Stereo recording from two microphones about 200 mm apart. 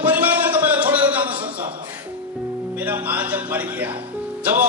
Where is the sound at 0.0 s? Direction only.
10° right (ahead or behind).